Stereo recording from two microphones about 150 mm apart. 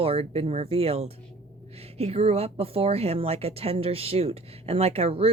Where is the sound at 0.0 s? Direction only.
40° right (ahead or behind).